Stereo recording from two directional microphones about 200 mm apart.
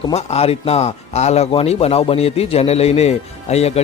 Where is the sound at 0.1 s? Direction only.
30° left (ahead or behind).